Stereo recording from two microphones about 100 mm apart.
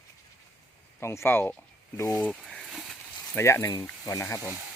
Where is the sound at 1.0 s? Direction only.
25° left (ahead or behind).